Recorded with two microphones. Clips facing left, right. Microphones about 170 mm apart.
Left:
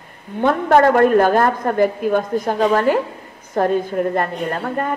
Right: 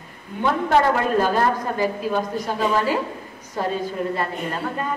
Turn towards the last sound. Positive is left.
turn(degrees=55)  # may be behind; listen again after turning